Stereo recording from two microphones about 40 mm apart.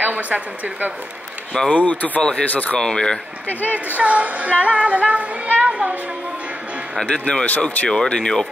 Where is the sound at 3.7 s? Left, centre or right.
Right.